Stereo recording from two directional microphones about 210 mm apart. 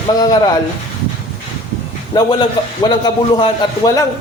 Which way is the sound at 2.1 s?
20° left (ahead or behind).